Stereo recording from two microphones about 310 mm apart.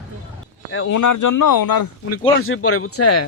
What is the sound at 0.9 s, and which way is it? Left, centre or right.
Speech, left.